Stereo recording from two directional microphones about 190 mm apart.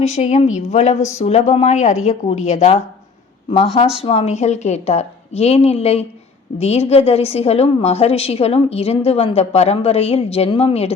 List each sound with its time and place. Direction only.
0.0 s a woman's voice: 35° left (ahead or behind)